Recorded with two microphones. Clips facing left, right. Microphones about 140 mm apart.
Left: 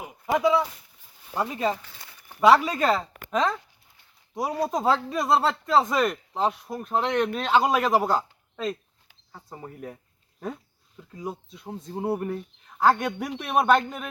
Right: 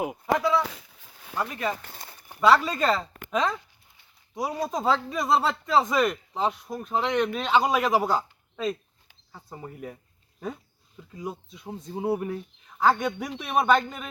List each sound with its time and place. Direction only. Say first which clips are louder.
0.3 s speech: left 4 dB; 20° left (ahead or behind)
0.6 s a sound: left 1 dB; 90° right
1.4 s speech: left 3 dB; 25° left (ahead or behind)
1.8 s crumpling: right 4 dB; 45° right (ahead or behind)
2.4 s speech: left 2 dB; 15° left (ahead or behind)
4.6 s speech: left 2 dB; 10° left (ahead or behind)